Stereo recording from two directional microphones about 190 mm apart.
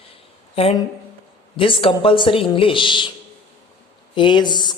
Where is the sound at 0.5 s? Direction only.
30° left (ahead or behind).